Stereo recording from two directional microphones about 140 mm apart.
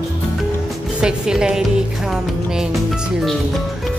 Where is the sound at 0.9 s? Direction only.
5° right (ahead or behind).